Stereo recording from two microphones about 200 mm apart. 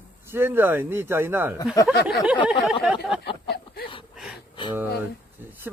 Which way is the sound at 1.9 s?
50° left (ahead or behind).